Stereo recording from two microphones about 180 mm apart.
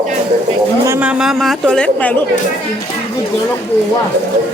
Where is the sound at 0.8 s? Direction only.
10° right (ahead or behind); by 2.2 s 10° left (ahead or behind).